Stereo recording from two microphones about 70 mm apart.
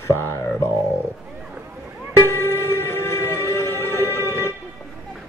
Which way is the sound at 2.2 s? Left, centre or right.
Left.